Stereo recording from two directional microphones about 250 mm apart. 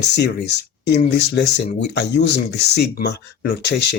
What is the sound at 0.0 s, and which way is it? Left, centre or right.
Speech, left.